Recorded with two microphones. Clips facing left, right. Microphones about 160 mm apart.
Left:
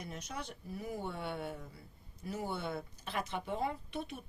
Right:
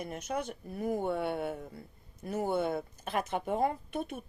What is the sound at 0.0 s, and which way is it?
Speech, 55° right (ahead or behind).